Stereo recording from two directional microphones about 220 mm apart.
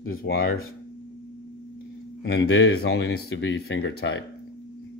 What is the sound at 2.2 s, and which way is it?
Speech, 50° left (ahead or behind).